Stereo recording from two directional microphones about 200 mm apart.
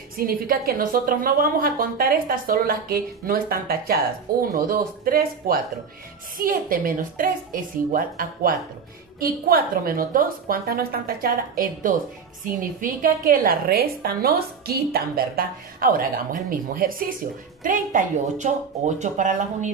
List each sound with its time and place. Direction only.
0.3 s a woman's voice: 45° right (ahead or behind)